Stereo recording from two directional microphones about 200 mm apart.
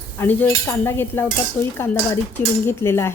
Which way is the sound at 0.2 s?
10° left (ahead or behind).